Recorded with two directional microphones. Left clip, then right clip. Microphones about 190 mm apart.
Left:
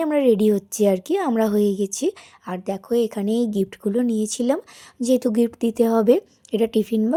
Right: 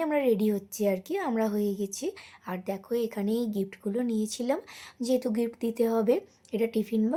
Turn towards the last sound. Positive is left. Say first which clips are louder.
# left 7 dB
turn(degrees=40)  # may be behind; listen again after turning